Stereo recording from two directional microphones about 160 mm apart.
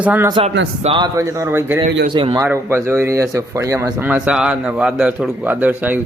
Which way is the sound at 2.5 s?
15° right (ahead or behind).